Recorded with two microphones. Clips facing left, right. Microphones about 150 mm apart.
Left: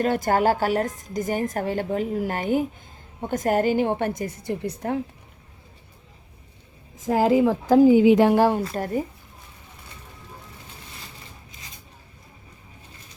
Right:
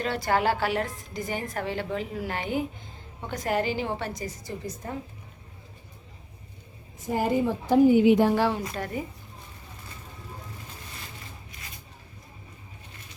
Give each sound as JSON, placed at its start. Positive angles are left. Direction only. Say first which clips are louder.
{"t": 0.0, "sound": "a woman's voice", "louder": "left 5 dB", "side_deg": 45}
{"t": 7.0, "sound": "a woman's voice", "louder": "left 6 dB", "side_deg": 90}
{"t": 8.4, "sound": "a woman's voice", "louder": "left 6 dB", "side_deg": 45}